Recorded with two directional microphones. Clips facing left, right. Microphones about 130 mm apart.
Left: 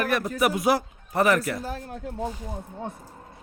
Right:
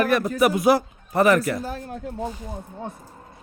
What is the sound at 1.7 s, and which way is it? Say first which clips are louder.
Speech: right 2 dB; 90° right.